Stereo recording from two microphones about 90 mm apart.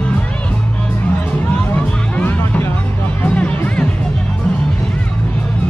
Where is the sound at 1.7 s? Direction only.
20° left (ahead or behind).